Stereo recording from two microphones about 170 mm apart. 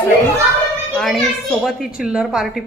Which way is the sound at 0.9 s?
Centre (ahead or behind).